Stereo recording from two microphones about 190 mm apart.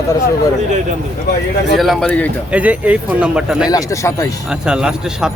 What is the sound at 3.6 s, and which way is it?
Speech, 15° left (ahead or behind).